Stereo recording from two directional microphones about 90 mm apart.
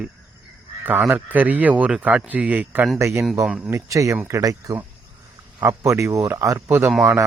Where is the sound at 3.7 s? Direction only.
35° right (ahead or behind).